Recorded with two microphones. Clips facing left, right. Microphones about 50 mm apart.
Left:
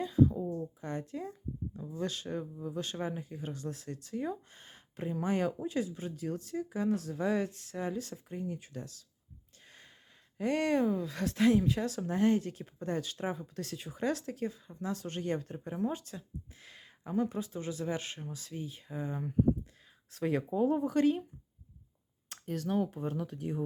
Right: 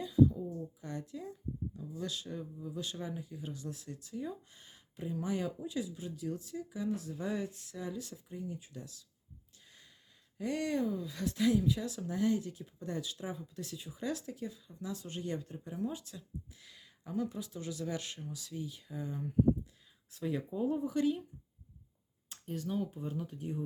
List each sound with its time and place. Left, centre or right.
0.0 s a sound: left
0.8 s speech: left
7.7 s speech: left
9.6 s gasp: left
10.3 s speech: left
20.1 s speech: left
22.3 s speech: left